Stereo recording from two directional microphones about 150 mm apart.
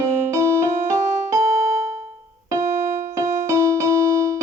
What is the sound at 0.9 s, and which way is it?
Music, 55° right (ahead or behind).